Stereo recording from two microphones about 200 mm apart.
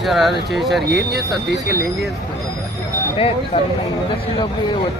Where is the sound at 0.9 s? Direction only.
55° right (ahead or behind).